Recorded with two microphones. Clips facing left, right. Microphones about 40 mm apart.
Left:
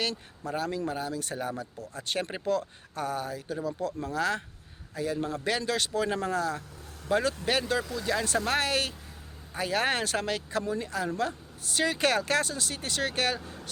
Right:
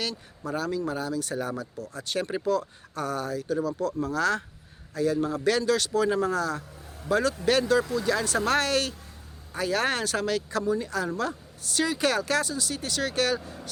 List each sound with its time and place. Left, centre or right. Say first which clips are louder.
0.5 s speech: right 2 dB; left
8.0 s speech: right 3 dB; centre
11.9 s speech: even; left